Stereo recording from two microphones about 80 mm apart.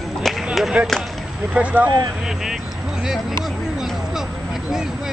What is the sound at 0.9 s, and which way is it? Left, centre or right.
Speech, centre.